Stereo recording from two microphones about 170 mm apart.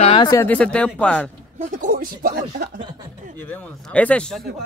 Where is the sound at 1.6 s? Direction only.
45° right (ahead or behind).